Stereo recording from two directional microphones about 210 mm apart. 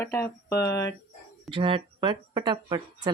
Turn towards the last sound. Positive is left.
turn(degrees=-20)  # may be behind; listen again after turning